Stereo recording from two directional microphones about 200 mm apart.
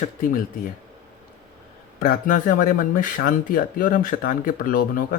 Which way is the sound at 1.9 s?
45° left (ahead or behind).